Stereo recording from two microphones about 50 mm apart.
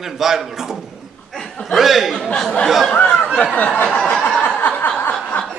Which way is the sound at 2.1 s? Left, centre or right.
Centre.